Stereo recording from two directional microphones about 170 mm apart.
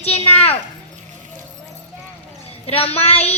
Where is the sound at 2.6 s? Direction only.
35° left (ahead or behind).